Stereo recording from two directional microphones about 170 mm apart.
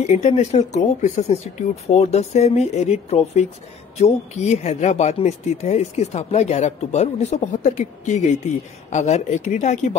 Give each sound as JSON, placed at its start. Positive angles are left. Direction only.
{"t": 0.0, "sound": "speech", "side_deg": 45}